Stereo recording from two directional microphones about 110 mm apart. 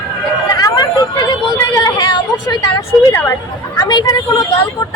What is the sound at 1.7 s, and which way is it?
Speech, 30° left (ahead or behind).